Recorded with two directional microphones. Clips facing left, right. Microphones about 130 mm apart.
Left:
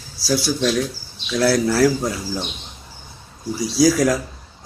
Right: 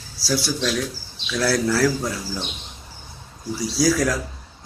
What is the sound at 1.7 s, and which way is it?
Speech, 15° left (ahead or behind).